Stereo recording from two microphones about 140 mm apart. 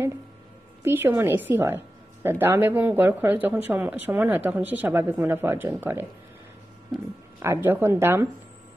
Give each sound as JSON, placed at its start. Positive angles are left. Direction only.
{"t": 0.8, "sound": "speech", "side_deg": -15}
{"t": 7.4, "sound": "speech", "side_deg": -15}